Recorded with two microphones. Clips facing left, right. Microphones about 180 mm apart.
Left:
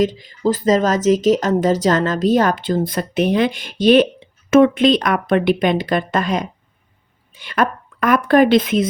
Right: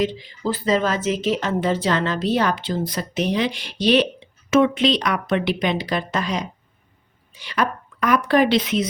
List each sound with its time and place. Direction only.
0.0 s speech: 45° left (ahead or behind)